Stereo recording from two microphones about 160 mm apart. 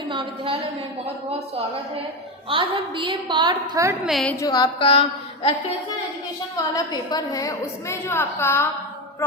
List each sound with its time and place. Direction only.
0.1 s a woman's voice: 35° right (ahead or behind)
2.5 s a woman's voice: 35° right (ahead or behind)
4.0 s a woman's voice: centre (ahead or behind)
4.4 s a woman's voice: 25° left (ahead or behind)
6.6 s a woman's voice: 25° left (ahead or behind)